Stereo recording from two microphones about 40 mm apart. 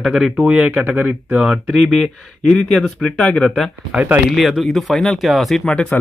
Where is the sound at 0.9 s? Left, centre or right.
Right.